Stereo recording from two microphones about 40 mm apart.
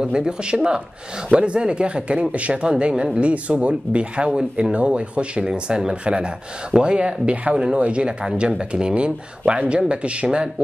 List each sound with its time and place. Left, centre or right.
0.0 s speech: right
5.4 s speech: centre